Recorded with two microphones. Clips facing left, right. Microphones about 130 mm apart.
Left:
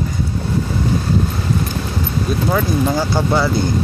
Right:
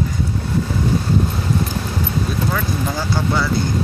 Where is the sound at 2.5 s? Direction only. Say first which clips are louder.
Left 5 dB; 30° left (ahead or behind).